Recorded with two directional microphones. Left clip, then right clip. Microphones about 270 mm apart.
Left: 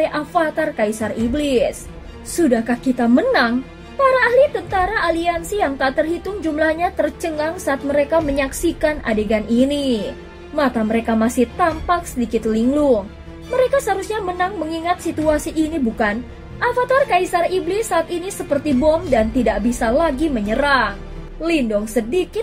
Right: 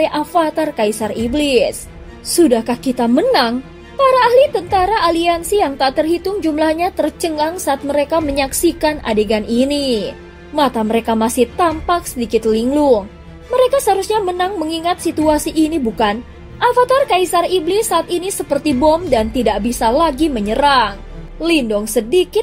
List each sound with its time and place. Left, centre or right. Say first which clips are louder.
0.0 s a woman's voice: right 3 dB; right